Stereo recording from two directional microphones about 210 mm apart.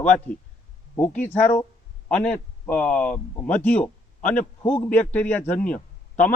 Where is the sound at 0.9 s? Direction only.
5° left (ahead or behind).